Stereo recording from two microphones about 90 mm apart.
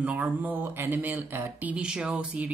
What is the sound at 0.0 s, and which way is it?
Speech, 15° right (ahead or behind).